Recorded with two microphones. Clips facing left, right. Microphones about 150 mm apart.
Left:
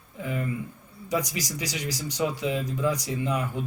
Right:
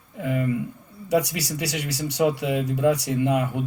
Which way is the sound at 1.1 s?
75° right (ahead or behind).